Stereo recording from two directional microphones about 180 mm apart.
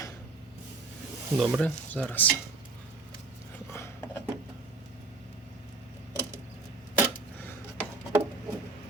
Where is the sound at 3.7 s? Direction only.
15° left (ahead or behind).